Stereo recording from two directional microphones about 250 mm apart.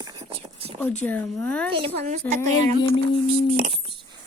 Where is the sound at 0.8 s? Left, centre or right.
Centre.